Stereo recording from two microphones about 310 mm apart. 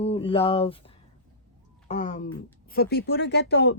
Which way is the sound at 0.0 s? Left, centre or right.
Centre.